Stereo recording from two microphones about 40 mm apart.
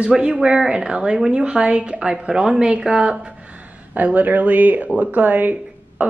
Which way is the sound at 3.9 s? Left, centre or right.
Right.